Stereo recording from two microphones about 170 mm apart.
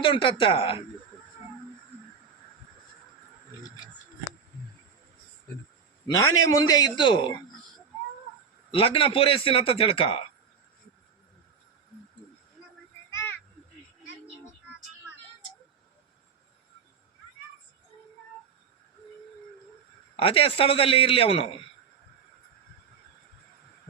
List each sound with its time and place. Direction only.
0.0 s a man's voice: 30° left (ahead or behind)
6.1 s a man's voice: 20° left (ahead or behind)
8.7 s a man's voice: 30° left (ahead or behind)
20.1 s a man's voice: 35° left (ahead or behind)